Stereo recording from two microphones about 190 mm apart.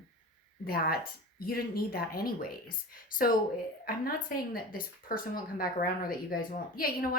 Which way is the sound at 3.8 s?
50° left (ahead or behind).